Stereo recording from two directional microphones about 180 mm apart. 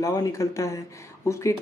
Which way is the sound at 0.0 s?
20° left (ahead or behind).